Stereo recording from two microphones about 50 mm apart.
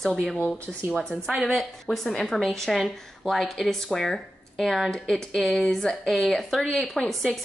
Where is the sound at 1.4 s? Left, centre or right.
Centre.